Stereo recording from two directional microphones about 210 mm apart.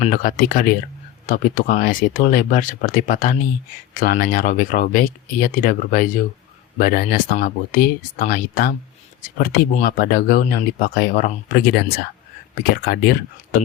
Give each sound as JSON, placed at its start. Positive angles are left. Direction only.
{"t": 0.0, "sound": "speech", "side_deg": 40}